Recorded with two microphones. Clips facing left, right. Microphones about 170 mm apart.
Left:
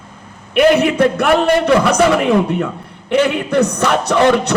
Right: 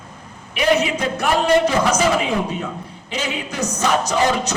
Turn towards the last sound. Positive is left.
turn(degrees=65)  # may be behind; listen again after turning